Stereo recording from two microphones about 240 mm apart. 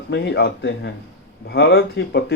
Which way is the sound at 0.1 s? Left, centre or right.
Left.